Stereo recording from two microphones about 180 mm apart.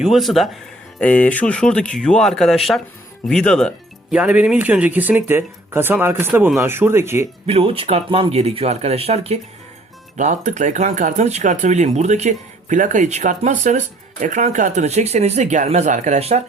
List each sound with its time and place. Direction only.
0.0 s speech: centre (ahead or behind)
7.4 s speech: 35° right (ahead or behind)